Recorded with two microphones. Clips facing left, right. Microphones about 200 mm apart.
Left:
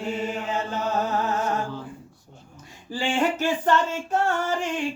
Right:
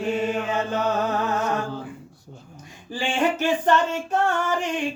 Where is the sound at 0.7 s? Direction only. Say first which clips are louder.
Right 1 dB; 70° right (ahead or behind).